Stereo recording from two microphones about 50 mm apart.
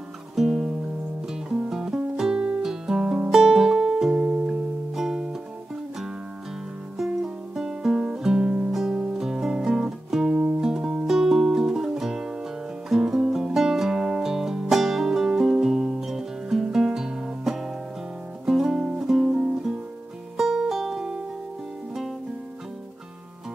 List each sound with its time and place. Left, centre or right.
0.4 s music: centre
7.5 s music: centre
8.7 s music: centre
20.3 s music: centre